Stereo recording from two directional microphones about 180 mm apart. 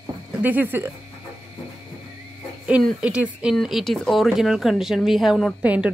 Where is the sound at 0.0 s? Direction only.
10° right (ahead or behind).